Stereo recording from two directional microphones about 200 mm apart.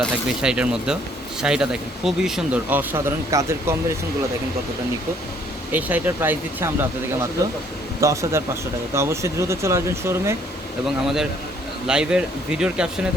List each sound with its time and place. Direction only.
0.0 s speech: 5° right (ahead or behind)
5.7 s speech: 10° right (ahead or behind)
10.8 s speech: centre (ahead or behind)